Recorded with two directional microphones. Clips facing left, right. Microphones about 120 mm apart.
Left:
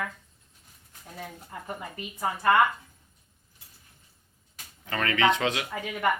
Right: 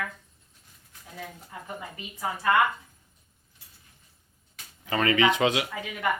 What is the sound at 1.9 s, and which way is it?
Speech, 45° left (ahead or behind).